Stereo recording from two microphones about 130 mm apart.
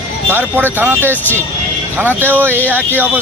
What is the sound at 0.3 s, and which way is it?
Speech, 15° right (ahead or behind).